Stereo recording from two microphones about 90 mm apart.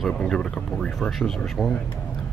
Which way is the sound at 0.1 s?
5° left (ahead or behind).